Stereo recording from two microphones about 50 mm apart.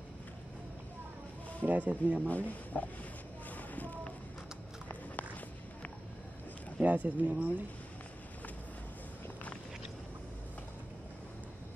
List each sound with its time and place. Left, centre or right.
1.6 s speech: right
2.2 s speech: left
3.7 s a sound: left
6.8 s speech: right